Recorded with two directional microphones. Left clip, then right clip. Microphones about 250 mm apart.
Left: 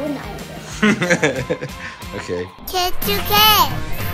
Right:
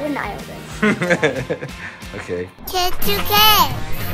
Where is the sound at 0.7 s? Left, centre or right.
Centre.